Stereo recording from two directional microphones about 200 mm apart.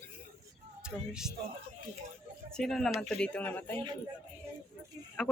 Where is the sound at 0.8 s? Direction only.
5° right (ahead or behind).